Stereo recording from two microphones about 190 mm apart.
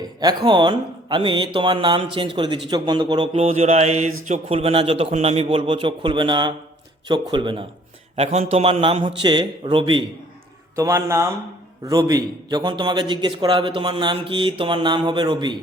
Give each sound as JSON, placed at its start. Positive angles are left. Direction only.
{"t": 0.2, "sound": "a man's voice", "side_deg": -20}